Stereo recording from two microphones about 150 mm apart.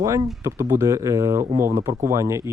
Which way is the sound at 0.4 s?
20° right (ahead or behind).